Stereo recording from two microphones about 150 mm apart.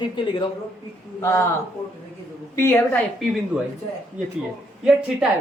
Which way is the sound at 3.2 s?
Centre (ahead or behind).